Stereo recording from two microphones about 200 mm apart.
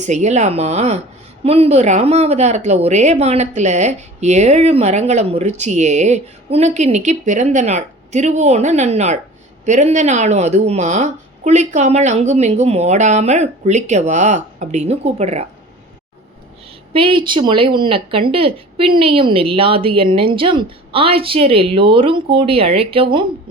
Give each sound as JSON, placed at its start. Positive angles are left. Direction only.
{"t": 0.0, "sound": "speech", "side_deg": -35}
{"t": 16.9, "sound": "speech", "side_deg": -25}